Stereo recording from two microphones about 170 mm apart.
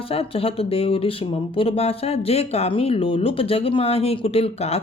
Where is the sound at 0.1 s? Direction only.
35° left (ahead or behind).